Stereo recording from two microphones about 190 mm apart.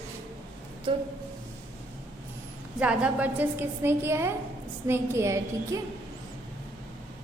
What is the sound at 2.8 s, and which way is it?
A woman's voice, 5° right (ahead or behind).